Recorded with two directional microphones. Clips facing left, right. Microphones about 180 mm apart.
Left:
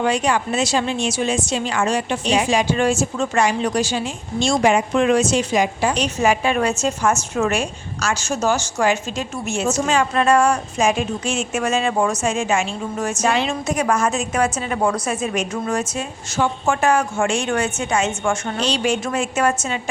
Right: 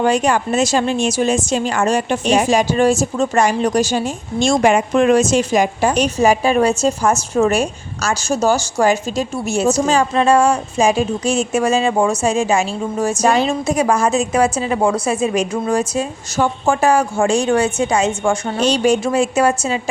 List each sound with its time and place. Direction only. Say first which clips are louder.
0.0 s a woman's voice: right 4 dB; 45° right (ahead or behind); by 18.6 s 30° right (ahead or behind)
18.6 s a woman's voice: right 7 dB; 40° right (ahead or behind)